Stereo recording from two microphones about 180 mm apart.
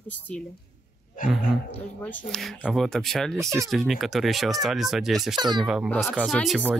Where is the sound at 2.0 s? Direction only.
5° left (ahead or behind).